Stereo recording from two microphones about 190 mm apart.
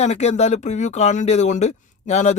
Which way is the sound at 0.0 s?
35° left (ahead or behind).